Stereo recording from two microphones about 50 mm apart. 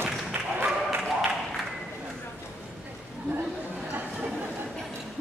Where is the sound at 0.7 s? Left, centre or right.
Centre.